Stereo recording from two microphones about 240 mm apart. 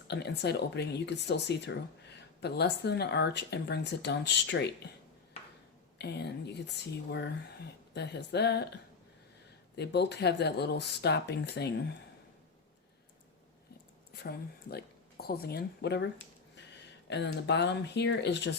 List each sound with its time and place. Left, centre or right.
0.1 s speech: left
6.0 s speech: left
9.7 s speech: left
14.1 s speech: left
17.1 s speech: left